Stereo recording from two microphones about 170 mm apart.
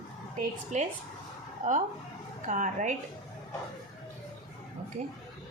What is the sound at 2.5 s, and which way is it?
Speech, 45° right (ahead or behind).